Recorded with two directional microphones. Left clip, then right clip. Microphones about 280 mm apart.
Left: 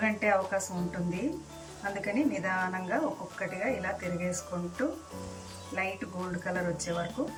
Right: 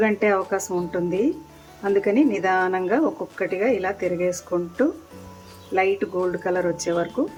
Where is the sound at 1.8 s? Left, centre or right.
Right.